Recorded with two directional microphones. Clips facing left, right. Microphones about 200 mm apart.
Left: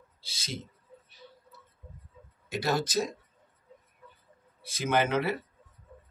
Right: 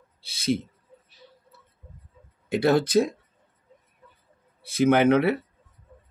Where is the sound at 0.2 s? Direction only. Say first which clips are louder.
Right 16 dB; 60° right (ahead or behind).